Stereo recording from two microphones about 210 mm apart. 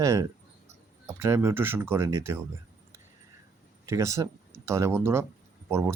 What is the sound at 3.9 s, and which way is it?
Speech, 15° right (ahead or behind).